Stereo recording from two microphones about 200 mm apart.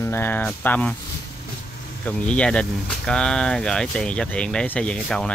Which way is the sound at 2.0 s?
5° left (ahead or behind).